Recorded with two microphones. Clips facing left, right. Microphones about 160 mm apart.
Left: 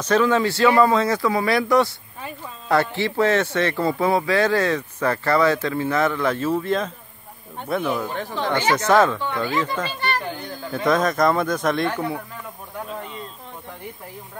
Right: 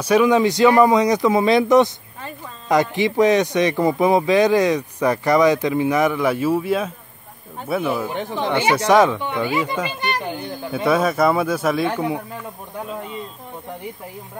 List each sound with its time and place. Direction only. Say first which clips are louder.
0.0 s speech: right 3 dB; 15° right (ahead or behind)
8.1 s speech: right 2 dB; 20° right (ahead or behind)